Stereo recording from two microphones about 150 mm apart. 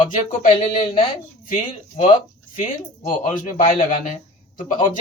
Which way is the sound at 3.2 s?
60° left (ahead or behind).